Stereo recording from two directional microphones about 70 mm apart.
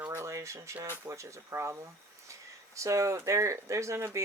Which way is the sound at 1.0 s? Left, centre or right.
Right.